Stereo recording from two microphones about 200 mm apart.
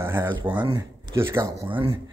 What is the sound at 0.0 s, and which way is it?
A man's voice, 10° right (ahead or behind).